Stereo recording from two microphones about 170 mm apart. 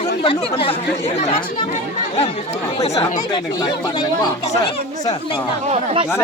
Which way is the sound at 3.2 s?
25° left (ahead or behind).